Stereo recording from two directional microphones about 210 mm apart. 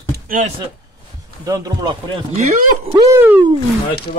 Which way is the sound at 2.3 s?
30° right (ahead or behind).